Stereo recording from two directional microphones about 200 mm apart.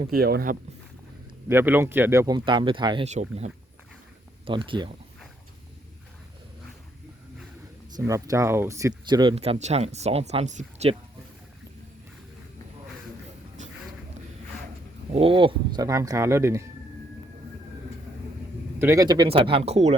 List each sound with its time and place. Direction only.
0.1 s speech: 50° right (ahead or behind)
1.5 s speech: 10° right (ahead or behind)
3.1 s speech: 35° right (ahead or behind)
4.4 s speech: 25° right (ahead or behind)
7.9 s speech: 15° right (ahead or behind); by 10.9 s 35° right (ahead or behind)
15.1 s speech: 25° right (ahead or behind)
18.8 s speech: 15° right (ahead or behind); by 20.0 s 30° right (ahead or behind)